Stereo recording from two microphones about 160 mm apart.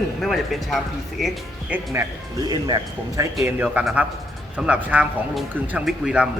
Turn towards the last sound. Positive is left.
turn(degrees=-5)  # may be behind; listen again after turning